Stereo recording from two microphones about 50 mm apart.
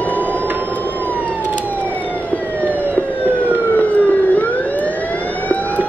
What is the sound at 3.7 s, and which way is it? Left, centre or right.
Emergency vehicle, left.